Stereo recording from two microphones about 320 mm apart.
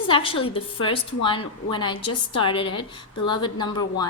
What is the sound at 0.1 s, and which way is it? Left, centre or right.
A woman's voice, centre.